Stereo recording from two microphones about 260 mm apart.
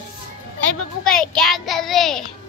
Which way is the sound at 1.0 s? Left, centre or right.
Centre.